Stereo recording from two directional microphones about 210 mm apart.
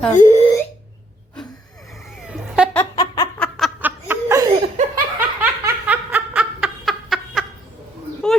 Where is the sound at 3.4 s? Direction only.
Centre (ahead or behind).